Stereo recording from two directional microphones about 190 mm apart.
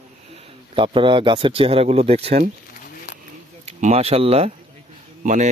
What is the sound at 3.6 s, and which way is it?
Speech, 35° right (ahead or behind).